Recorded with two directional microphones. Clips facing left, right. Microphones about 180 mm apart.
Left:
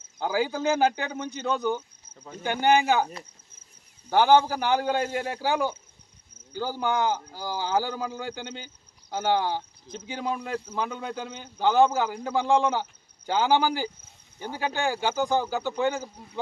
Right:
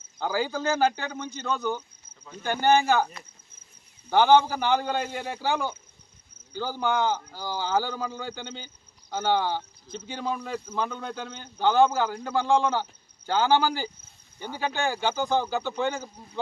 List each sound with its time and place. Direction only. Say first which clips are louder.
0.3 s speech: left 2 dB; 15° left (ahead or behind)
4.1 s speech: even; 10° left (ahead or behind)